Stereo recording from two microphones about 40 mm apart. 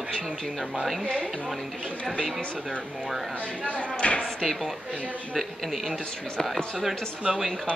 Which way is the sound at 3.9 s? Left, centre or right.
Left.